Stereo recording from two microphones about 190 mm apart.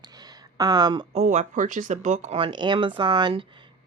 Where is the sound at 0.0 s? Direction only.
20° right (ahead or behind).